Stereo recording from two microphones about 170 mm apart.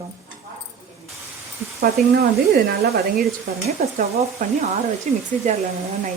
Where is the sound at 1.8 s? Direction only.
60° right (ahead or behind).